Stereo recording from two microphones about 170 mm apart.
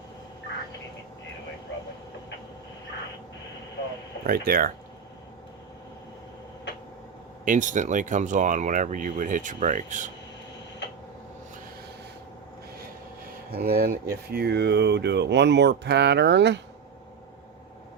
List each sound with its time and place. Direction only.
4.2 s speech: 60° right (ahead or behind)
7.4 s speech: 50° right (ahead or behind)
13.5 s speech: 65° right (ahead or behind); by 16.6 s 90° right